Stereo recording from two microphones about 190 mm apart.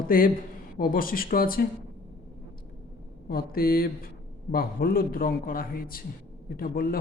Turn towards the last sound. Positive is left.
turn(degrees=50)  # may be behind; listen again after turning